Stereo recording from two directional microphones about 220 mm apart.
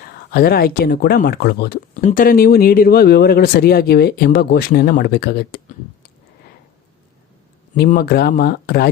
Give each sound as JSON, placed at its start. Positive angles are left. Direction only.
{"t": 0.0, "sound": "speech", "side_deg": 45}
{"t": 7.8, "sound": "speech", "side_deg": 45}